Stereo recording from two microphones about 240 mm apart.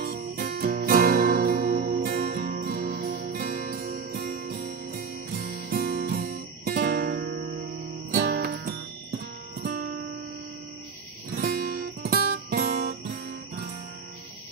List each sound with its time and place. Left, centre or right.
0.0 s music: right
12.0 s guitar: right